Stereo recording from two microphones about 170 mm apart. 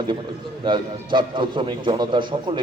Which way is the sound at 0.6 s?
25° right (ahead or behind).